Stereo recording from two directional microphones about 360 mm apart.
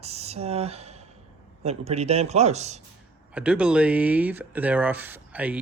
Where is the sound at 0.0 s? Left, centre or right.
Centre.